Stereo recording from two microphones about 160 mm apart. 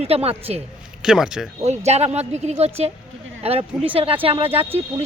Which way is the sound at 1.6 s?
40° right (ahead or behind).